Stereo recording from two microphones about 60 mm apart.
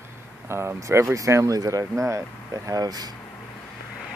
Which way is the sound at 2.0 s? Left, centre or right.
Right.